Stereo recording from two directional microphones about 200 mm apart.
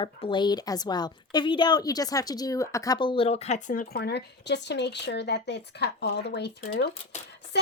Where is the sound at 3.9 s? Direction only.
55° left (ahead or behind).